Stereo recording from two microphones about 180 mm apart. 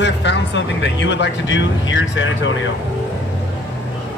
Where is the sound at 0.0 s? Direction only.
80° left.